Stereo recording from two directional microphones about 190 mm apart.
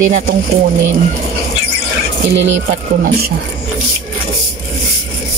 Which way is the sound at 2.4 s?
75° right (ahead or behind).